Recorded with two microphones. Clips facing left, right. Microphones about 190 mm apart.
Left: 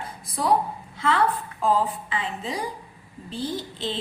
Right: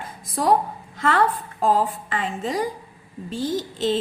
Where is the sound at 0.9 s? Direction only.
45° right (ahead or behind).